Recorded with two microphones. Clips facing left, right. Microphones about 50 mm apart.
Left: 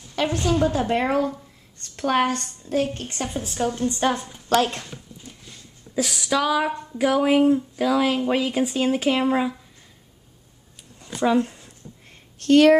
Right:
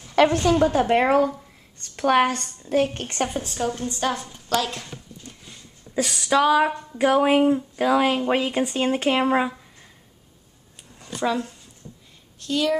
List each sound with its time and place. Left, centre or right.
0.1 s a woman's voice: right
0.6 s a woman's voice: centre
2.2 s speech: centre
2.6 s a woman's voice: right
2.9 s a woman's voice: right
3.4 s a woman's voice: centre
4.0 s a woman's voice: left
4.5 s speech: left
5.5 s a sound: centre
6.3 s speech: centre
8.5 s speech: centre
9.1 s speech: centre
12.4 s speech: left